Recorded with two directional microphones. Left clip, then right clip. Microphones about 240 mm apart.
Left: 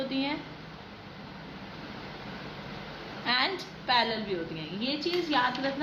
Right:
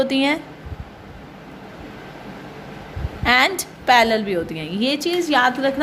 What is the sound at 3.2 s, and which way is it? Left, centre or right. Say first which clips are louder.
A woman's voice: right 12 dB; right.